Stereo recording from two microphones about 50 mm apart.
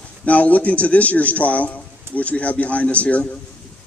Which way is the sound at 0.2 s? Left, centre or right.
Left.